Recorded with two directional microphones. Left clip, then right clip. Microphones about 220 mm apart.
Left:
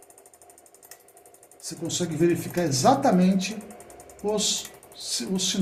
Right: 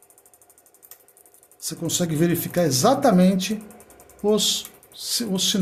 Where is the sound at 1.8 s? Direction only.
50° right (ahead or behind).